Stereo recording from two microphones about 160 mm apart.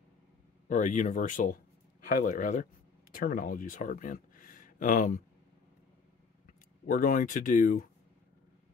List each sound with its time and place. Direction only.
0.7 s speech: 55° left (ahead or behind)
6.4 s speech: 60° left (ahead or behind)